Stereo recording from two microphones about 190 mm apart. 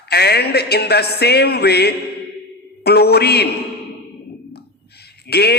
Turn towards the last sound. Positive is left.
turn(degrees=60)  # may be behind; listen again after turning